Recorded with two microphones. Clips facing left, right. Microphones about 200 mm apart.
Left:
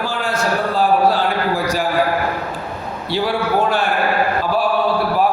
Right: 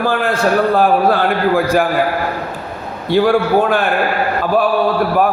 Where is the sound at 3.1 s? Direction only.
50° right (ahead or behind).